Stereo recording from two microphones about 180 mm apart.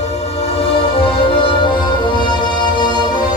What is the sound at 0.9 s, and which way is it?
Music, 30° left (ahead or behind).